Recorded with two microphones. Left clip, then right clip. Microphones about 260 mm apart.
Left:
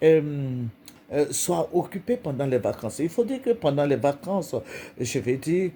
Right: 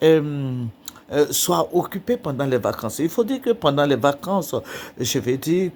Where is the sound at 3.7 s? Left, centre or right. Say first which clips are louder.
Right 4 dB; right.